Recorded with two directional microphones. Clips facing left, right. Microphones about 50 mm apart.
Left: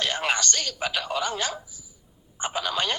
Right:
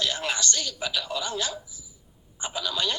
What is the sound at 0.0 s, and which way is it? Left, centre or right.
Speech, left.